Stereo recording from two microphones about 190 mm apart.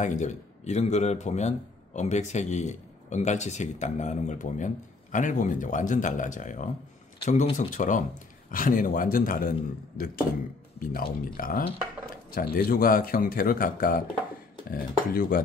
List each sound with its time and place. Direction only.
0.0 s speech: 40° left (ahead or behind)